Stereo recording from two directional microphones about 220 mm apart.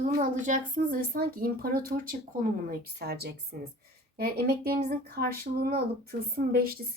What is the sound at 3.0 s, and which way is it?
Speech, 45° right (ahead or behind).